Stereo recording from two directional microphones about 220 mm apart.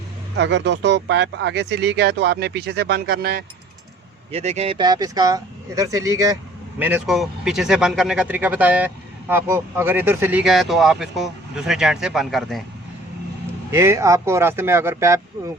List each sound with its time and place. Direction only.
0.3 s speech: 55° right (ahead or behind)
4.3 s speech: 30° right (ahead or behind); by 12.6 s centre (ahead or behind)
13.7 s speech: 10° right (ahead or behind)